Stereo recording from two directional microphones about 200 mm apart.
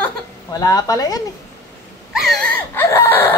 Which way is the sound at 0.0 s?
15° left (ahead or behind).